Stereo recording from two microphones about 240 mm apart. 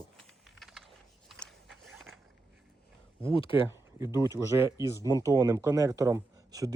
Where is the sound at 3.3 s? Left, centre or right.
Left.